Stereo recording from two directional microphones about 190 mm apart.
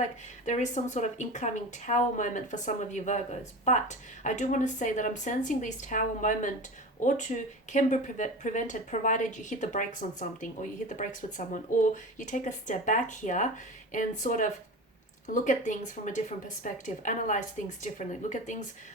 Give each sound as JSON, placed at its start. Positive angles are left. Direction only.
{"t": 0.0, "sound": "speech", "side_deg": 40}